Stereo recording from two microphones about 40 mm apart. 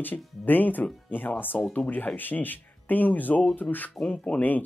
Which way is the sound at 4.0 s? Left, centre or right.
Left.